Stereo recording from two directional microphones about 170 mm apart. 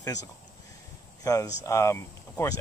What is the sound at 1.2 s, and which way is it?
Speech, 20° left (ahead or behind).